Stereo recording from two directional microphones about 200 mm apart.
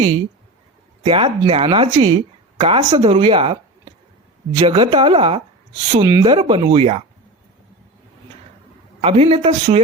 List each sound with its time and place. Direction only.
1.0 s speech: 30° right (ahead or behind)
9.0 s speech: 30° right (ahead or behind)